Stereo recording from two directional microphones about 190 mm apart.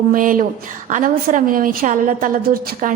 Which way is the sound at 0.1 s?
45° right (ahead or behind).